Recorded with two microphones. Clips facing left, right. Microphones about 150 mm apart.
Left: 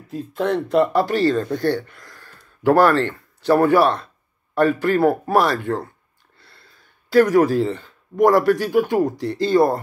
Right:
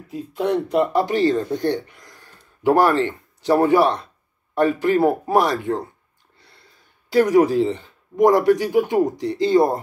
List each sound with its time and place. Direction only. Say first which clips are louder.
0.1 s speech: even; 15° right (ahead or behind)